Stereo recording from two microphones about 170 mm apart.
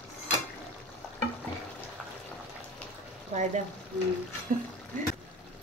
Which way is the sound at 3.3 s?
45° right (ahead or behind).